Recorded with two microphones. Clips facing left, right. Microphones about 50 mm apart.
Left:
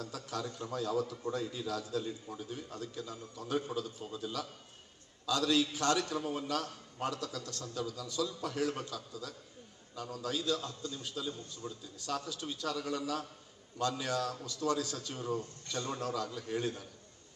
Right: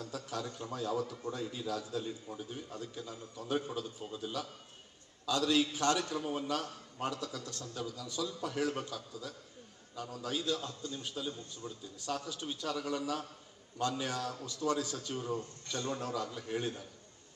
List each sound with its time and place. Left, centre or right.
0.0 s a man's voice: right